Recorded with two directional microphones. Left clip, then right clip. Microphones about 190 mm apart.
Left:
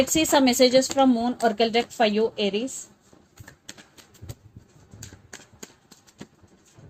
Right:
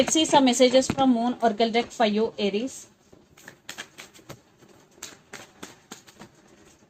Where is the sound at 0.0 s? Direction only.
35° left (ahead or behind).